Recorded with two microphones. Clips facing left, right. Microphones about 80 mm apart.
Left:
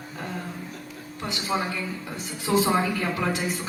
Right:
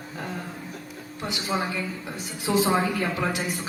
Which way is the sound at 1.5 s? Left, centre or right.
Right.